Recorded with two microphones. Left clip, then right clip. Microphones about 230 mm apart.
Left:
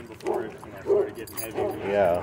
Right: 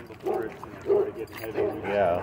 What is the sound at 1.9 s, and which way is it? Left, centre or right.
Speech, left.